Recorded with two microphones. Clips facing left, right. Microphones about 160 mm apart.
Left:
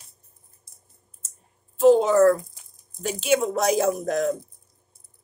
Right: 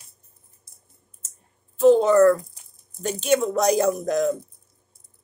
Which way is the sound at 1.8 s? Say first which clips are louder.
Right 1 dB; 5° left (ahead or behind).